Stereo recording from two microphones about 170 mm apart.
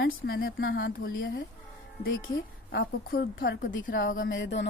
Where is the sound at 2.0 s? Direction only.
70° left (ahead or behind); by 3.8 s 90° left.